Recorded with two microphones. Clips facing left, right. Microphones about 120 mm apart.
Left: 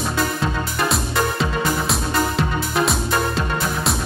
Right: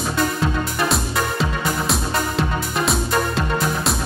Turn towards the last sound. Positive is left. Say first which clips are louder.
# right 1 dB
turn(degrees=0)  # may be behind; listen again after turning